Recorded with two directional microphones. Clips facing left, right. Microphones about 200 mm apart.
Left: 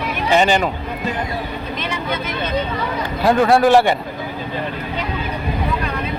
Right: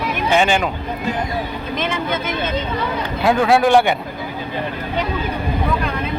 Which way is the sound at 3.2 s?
Centre (ahead or behind).